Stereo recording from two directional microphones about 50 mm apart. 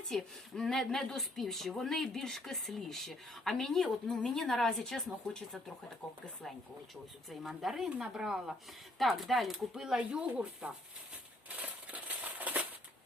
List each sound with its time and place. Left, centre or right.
0.1 s speech: centre
7.3 s speech: centre
9.0 s speech: centre
9.7 s speech: centre
11.4 s a sound: right